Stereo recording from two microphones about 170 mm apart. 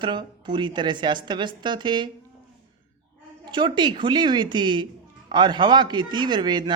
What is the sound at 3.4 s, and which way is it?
Speech, 25° right (ahead or behind).